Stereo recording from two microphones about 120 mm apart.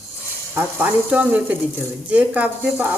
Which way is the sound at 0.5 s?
15° right (ahead or behind).